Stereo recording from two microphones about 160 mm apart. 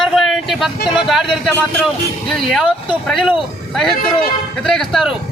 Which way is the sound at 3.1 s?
Centre (ahead or behind).